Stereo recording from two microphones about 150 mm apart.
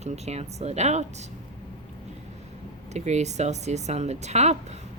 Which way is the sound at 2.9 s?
50° right (ahead or behind).